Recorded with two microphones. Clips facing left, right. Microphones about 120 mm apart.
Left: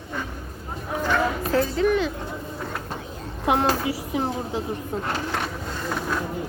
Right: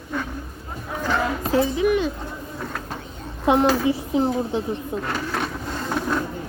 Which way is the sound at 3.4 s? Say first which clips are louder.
Right 4 dB; 25° right (ahead or behind).